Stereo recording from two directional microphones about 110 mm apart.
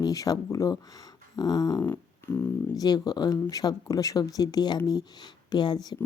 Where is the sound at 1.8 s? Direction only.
20° left (ahead or behind).